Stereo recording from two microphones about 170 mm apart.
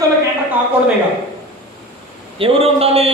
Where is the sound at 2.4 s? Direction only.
35° right (ahead or behind).